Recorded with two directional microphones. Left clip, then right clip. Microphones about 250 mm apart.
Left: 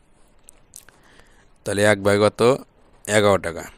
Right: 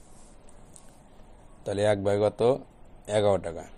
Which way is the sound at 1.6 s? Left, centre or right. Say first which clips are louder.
Left 7 dB; left.